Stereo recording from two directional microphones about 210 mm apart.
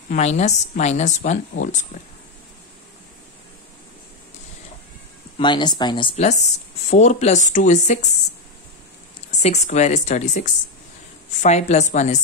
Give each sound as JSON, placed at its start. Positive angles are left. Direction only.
{"t": 0.1, "sound": "speech", "side_deg": 30}
{"t": 5.4, "sound": "speech", "side_deg": 20}
{"t": 9.3, "sound": "speech", "side_deg": 30}